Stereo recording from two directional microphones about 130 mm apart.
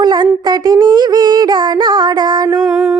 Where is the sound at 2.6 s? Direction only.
5° right (ahead or behind).